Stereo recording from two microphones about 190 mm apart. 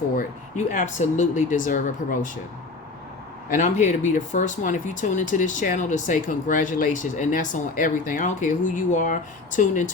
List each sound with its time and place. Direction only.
0.2 s speech: 40° left (ahead or behind)
3.5 s speech: 40° left (ahead or behind)